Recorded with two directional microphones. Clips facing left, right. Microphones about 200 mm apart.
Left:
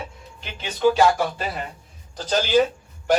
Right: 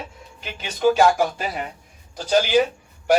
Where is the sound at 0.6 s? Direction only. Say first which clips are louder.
Right 1 dB; 10° right (ahead or behind).